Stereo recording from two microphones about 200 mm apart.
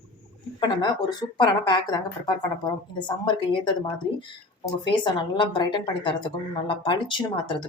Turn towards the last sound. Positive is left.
turn(degrees=25)  # may be behind; listen again after turning